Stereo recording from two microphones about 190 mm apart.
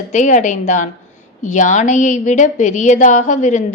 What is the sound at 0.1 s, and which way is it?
A woman's voice, 40° left (ahead or behind).